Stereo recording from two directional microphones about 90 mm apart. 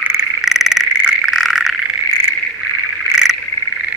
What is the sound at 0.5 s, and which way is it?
Frog, 5° right (ahead or behind).